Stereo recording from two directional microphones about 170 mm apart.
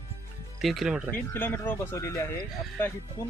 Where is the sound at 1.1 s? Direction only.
10° left (ahead or behind).